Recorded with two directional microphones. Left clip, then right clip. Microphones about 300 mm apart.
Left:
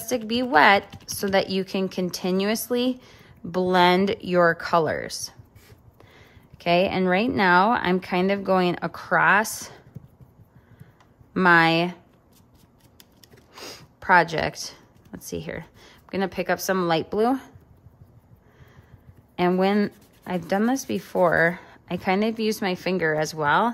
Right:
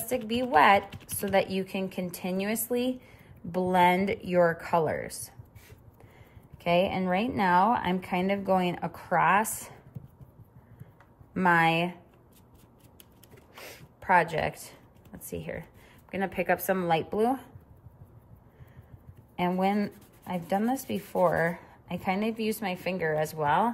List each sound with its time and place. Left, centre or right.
0.1 s speech: centre
6.6 s speech: centre
11.3 s speech: centre
13.6 s speech: centre
19.3 s speech: centre